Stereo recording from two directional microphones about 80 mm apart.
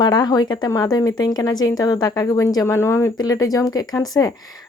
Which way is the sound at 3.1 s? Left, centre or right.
Left.